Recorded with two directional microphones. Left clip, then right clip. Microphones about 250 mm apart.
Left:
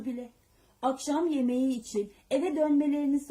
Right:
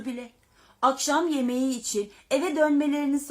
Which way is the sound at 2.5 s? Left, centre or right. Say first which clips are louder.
Right 4 dB; right.